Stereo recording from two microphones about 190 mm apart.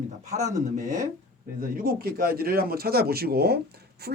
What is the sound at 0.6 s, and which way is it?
Speech, 40° right (ahead or behind).